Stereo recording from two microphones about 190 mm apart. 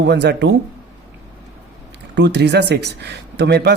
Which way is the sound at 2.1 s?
65° right (ahead or behind).